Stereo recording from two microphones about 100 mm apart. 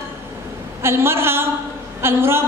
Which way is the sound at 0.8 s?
25° right (ahead or behind).